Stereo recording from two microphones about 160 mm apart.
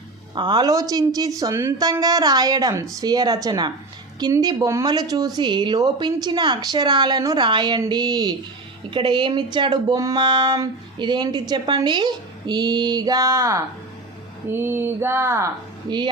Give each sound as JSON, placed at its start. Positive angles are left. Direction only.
{"t": 0.3, "sound": "speech", "side_deg": -25}
{"t": 14.6, "sound": "a sound", "side_deg": -15}
{"t": 15.9, "sound": "speech", "side_deg": -25}